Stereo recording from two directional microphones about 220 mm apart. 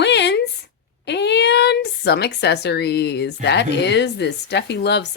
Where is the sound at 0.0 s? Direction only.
50° left (ahead or behind).